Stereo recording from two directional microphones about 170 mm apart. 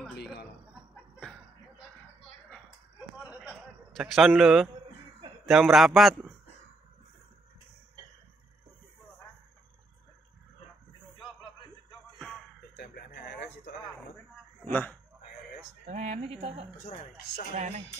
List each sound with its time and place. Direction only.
3.3 s a sound: centre (ahead or behind)
5.4 s a man's voice: centre (ahead or behind)
12.2 s music: 5° left (ahead or behind)
12.7 s a sound: 80° left
14.6 s speech: 10° left (ahead or behind)
15.9 s speech: 40° right (ahead or behind)
17.6 s speech: 40° right (ahead or behind)